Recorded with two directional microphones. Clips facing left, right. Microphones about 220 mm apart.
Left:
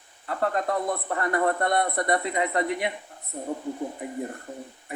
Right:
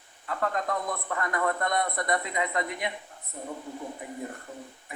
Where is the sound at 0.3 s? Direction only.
35° left (ahead or behind).